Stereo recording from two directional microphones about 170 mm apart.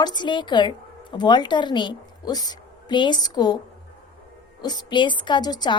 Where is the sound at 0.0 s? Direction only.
25° left (ahead or behind).